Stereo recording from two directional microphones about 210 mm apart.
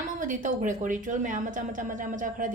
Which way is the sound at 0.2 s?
40° right (ahead or behind).